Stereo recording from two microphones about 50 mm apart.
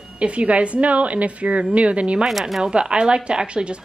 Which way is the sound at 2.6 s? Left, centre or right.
Centre.